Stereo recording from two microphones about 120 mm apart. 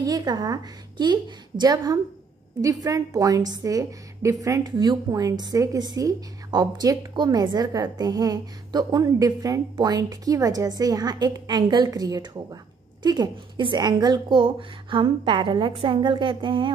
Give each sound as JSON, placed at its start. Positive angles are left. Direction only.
{"t": 0.0, "sound": "a woman's voice", "side_deg": -30}